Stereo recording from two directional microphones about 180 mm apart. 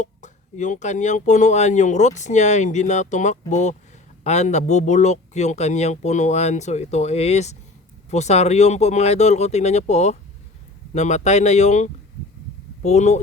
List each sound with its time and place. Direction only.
0.0 s speech: 45° left (ahead or behind)